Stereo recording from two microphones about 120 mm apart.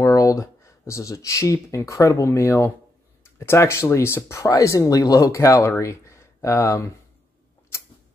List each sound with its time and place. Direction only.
0.0 s speech: 30° left (ahead or behind)